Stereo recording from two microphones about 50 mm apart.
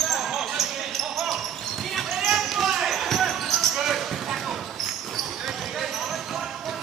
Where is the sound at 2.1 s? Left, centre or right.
Centre.